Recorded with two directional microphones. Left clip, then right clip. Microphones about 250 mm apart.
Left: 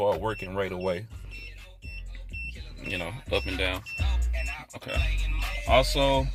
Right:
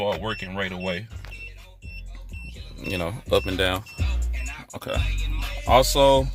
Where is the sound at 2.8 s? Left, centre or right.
Right.